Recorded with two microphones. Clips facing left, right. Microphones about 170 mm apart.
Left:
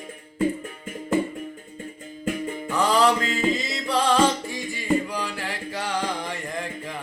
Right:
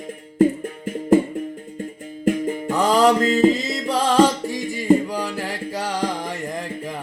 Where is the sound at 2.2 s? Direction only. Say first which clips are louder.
Right 7 dB; 40° right (ahead or behind).